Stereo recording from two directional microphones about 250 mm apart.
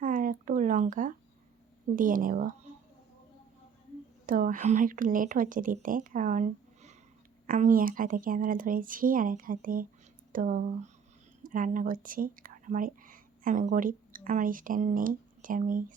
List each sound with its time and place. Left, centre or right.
0.0 s a sound: right
2.0 s a woman's voice: right
4.3 s a woman's voice: right